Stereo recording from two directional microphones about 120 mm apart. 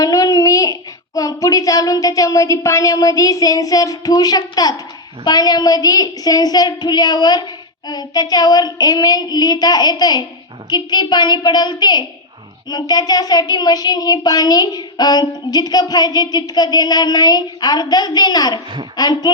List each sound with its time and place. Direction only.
0.0 s a child's voice: 30° left (ahead or behind)
5.2 s child singing: 35° left (ahead or behind)